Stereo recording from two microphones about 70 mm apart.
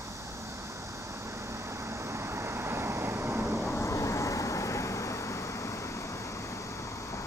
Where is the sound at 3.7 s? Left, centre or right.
Left.